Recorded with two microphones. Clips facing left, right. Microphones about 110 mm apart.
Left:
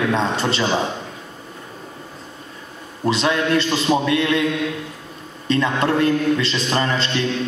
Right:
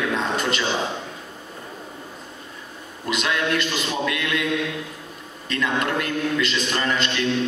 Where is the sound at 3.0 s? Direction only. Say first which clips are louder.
Left 5 dB; 30° left (ahead or behind).